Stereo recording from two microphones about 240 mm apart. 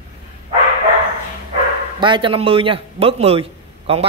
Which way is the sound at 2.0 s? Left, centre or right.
Centre.